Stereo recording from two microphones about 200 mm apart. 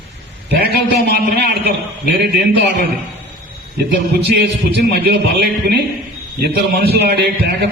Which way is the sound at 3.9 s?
60° right (ahead or behind).